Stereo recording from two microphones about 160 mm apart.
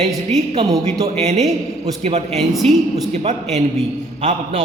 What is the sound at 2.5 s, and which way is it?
Speech, centre (ahead or behind).